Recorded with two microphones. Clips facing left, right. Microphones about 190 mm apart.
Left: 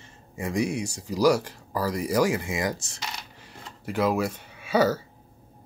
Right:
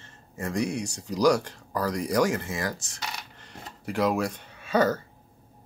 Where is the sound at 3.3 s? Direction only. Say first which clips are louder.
Right 1 dB; 5° left (ahead or behind).